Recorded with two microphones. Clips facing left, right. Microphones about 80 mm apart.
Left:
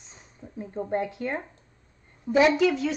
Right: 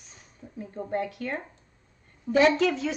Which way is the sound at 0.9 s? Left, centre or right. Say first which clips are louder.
Left 2 dB; left.